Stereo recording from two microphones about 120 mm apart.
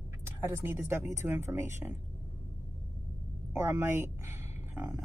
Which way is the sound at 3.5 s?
20° right (ahead or behind).